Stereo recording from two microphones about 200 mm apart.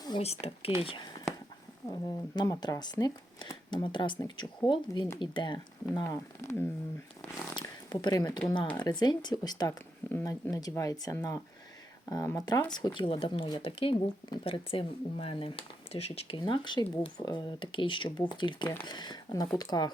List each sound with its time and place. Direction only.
0.2 s speech: 30° left (ahead or behind); by 6.7 s 15° left (ahead or behind)
7.5 s a sound: 20° left (ahead or behind)
8.8 s speech: 20° left (ahead or behind)